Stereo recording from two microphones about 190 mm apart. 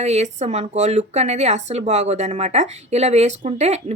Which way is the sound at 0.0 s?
35° right (ahead or behind).